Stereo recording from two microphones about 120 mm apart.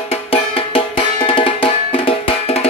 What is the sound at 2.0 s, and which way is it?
Music, 55° left (ahead or behind).